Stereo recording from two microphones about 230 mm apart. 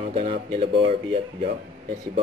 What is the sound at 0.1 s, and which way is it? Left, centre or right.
Speech, right.